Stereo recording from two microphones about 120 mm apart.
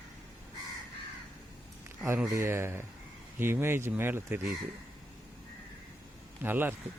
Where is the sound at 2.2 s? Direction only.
25° right (ahead or behind).